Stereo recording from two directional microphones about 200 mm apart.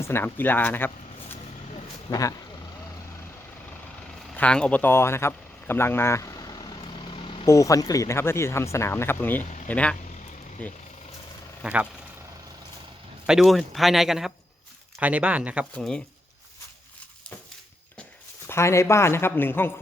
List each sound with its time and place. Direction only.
0.0 s speech: 10° left (ahead or behind)
2.0 s speech: 15° left (ahead or behind)
4.4 s a sound: 5° left (ahead or behind); by 7.4 s 25° left (ahead or behind)
7.4 s speech: 15° left (ahead or behind)
11.6 s speech: 5° right (ahead or behind)
13.2 s speech: centre (ahead or behind)
18.4 s speech: 15° left (ahead or behind)